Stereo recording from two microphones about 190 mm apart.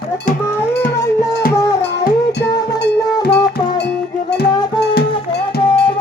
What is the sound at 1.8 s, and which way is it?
Music, 65° left (ahead or behind).